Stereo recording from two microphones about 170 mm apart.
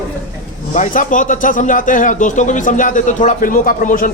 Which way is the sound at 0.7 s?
50° left (ahead or behind).